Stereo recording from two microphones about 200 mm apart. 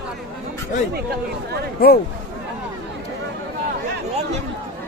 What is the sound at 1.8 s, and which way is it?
Speech, 50° left (ahead or behind).